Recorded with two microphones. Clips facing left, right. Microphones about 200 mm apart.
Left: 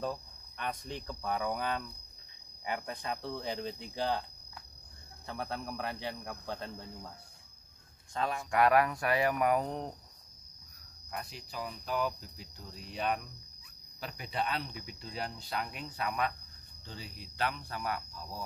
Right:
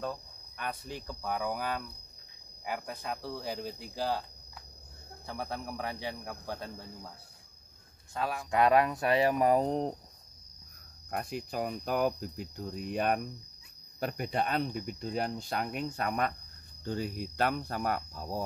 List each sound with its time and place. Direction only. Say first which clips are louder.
0.0 s speech: even; centre (ahead or behind)
5.2 s speech: right 1 dB; 10° right (ahead or behind)
8.1 s speech: even; 5° right (ahead or behind)
8.5 s speech: right 2 dB; 20° right (ahead or behind)
11.1 s speech: right 7 dB; 50° right (ahead or behind)